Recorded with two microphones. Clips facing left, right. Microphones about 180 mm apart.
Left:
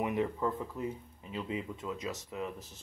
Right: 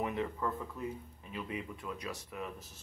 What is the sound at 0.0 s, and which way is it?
Speech, 15° left (ahead or behind).